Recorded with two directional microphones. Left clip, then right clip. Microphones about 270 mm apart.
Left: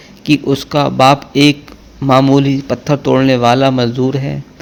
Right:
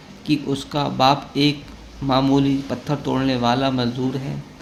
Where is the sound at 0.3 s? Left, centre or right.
Left.